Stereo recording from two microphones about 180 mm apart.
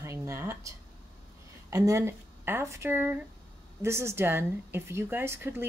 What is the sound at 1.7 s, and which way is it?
A woman's voice, 15° right (ahead or behind).